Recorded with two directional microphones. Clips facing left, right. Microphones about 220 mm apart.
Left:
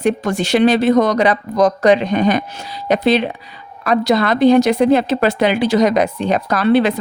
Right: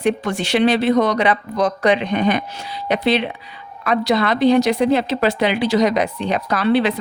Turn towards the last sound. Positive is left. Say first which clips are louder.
# left 3 dB
turn(degrees=45)  # may be behind; listen again after turning